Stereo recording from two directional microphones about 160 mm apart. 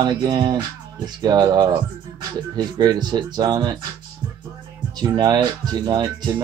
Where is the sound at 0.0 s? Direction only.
25° right (ahead or behind).